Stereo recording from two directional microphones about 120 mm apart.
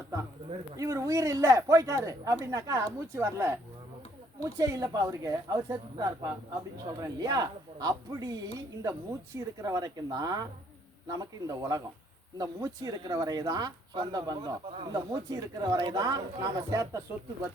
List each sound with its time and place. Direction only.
0.8 s speech: 25° right (ahead or behind)